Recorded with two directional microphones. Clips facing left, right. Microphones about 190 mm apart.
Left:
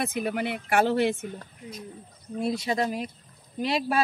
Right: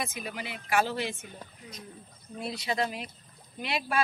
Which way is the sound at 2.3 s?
45° left (ahead or behind).